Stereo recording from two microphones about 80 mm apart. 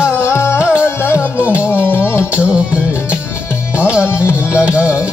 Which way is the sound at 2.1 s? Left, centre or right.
Centre.